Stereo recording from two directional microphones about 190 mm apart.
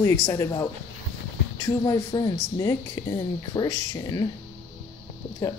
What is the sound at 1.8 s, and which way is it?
Speech, 20° left (ahead or behind).